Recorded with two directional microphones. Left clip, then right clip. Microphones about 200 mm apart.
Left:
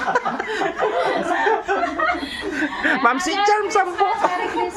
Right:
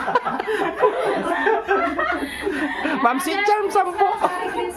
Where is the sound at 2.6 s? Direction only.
5° right (ahead or behind).